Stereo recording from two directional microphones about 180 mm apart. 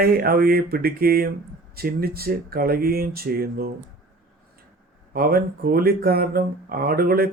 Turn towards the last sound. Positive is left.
turn(degrees=-55)  # may be behind; listen again after turning